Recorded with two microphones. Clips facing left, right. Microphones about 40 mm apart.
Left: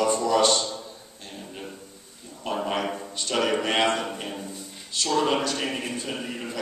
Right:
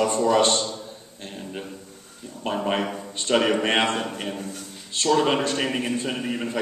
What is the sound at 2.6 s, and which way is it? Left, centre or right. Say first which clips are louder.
Speech: right 2 dB; centre.